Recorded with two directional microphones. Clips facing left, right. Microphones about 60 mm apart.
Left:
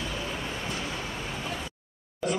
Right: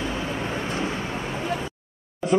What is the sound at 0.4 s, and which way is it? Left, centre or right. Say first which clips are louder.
Vehicle: right 7 dB; right.